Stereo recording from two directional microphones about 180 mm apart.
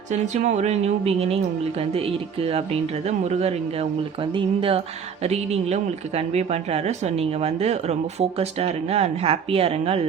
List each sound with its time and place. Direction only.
0.1 s speech: 40° right (ahead or behind)